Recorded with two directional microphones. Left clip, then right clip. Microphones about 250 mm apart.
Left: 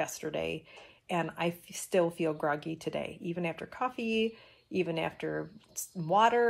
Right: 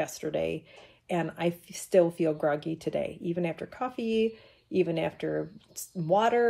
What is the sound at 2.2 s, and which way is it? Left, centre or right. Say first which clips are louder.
A woman's voice: right 4 dB; centre.